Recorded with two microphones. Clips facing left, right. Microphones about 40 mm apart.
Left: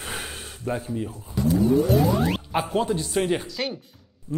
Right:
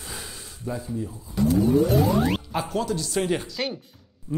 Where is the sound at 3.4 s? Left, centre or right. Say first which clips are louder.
Even; centre.